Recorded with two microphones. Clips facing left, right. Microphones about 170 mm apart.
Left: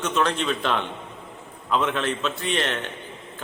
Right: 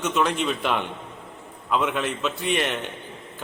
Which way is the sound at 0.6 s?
10° right (ahead or behind).